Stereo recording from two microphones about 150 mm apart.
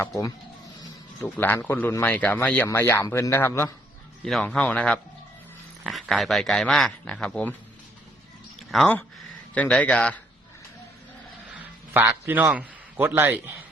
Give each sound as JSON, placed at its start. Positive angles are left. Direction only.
{"t": 0.8, "sound": "speech", "side_deg": 15}
{"t": 4.2, "sound": "speech", "side_deg": 0}
{"t": 9.6, "sound": "speech", "side_deg": 10}
{"t": 11.9, "sound": "a man's voice", "side_deg": -15}